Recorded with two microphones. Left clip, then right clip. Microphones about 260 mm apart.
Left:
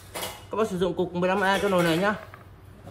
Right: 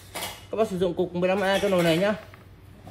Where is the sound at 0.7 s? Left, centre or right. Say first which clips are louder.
Right 1 dB; left.